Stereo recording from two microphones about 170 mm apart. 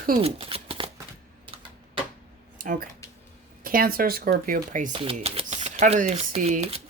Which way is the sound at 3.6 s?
60° right (ahead or behind).